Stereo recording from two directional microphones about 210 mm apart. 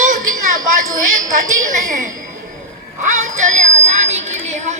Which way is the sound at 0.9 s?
40° right (ahead or behind).